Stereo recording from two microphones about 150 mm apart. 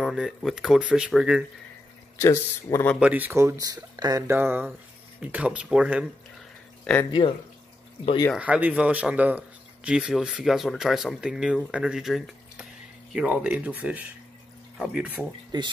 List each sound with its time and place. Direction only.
0.0 s speech: centre (ahead or behind)
2.1 s speech: 20° left (ahead or behind)
3.0 s speech: 10° right (ahead or behind)
6.8 s a sound: 10° left (ahead or behind)
7.1 s speech: 35° left (ahead or behind)
8.4 s speech: 10° right (ahead or behind)
15.5 s speech: 30° right (ahead or behind)